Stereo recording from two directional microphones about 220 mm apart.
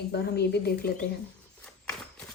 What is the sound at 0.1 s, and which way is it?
Speech, 50° left (ahead or behind).